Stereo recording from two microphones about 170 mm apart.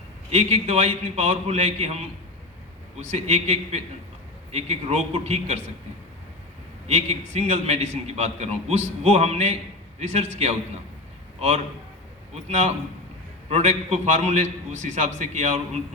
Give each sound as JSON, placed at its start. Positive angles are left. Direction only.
{"t": 0.3, "sound": "a man's voice", "side_deg": -35}
{"t": 3.1, "sound": "a man's voice", "side_deg": -40}
{"t": 6.8, "sound": "a man's voice", "side_deg": -40}